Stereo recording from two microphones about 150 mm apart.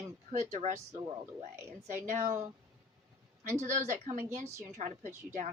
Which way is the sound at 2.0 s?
55° right (ahead or behind).